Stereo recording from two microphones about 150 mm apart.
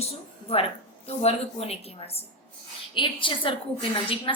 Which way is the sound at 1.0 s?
40° left (ahead or behind).